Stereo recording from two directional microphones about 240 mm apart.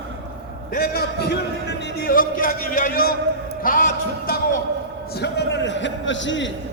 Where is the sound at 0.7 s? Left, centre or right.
Left.